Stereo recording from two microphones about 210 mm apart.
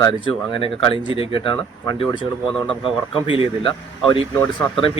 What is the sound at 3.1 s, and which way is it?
Speech, 25° left (ahead or behind).